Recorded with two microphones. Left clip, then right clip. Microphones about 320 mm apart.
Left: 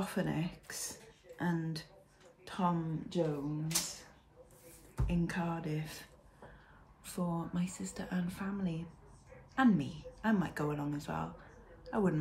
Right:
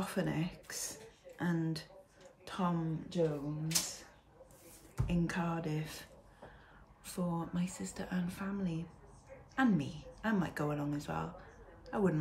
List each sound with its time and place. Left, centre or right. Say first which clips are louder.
0.0 s speech: even; centre
5.0 s speech: even; centre
7.1 s speech: even; centre